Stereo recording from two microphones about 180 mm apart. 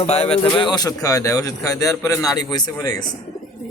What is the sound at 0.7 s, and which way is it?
A man's voice, 20° left (ahead or behind).